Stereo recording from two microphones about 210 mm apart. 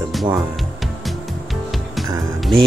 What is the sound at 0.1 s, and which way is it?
Music, centre (ahead or behind).